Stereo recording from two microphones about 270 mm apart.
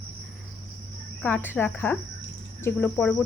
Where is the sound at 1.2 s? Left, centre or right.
Centre.